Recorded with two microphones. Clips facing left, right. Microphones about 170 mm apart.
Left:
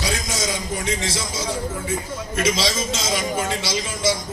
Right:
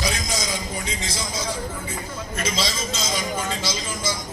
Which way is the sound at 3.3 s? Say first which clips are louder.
Left 3 dB; 75° left (ahead or behind).